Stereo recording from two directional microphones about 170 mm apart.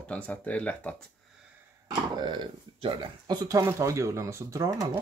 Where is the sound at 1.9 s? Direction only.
25° right (ahead or behind).